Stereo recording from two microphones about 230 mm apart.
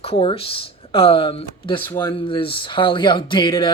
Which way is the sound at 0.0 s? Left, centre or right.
Left.